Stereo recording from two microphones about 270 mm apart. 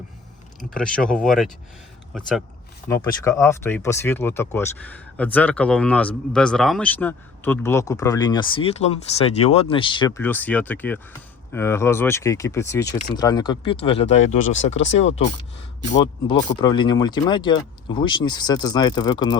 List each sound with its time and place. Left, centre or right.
0.8 s speech: centre
2.9 s speech: centre
15.0 s speech: left
15.9 s speech: centre